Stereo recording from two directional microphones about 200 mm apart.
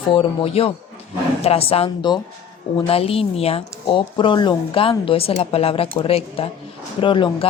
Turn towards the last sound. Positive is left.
turn(degrees=25)  # may be behind; listen again after turning